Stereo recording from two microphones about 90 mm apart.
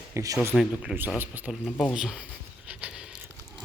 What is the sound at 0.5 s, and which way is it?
Speech, centre (ahead or behind).